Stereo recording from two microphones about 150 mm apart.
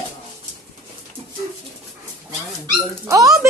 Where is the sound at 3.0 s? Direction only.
25° right (ahead or behind).